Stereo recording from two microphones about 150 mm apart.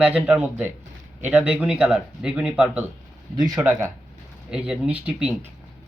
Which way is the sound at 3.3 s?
25° right (ahead or behind).